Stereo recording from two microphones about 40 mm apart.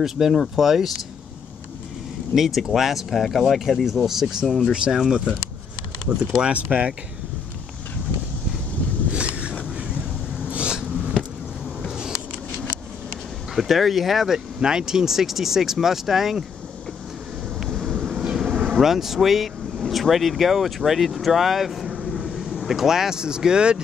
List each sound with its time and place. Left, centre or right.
0.0 s speech: centre
2.3 s speech: centre
4.5 s speech: centre
6.5 s speech: right
9.1 s vehicle: right
10.4 s a sound: right
13.6 s speech: centre
14.6 s speech: centre
17.6 s vehicle: centre
18.1 s vehicle: centre
18.7 s speech: centre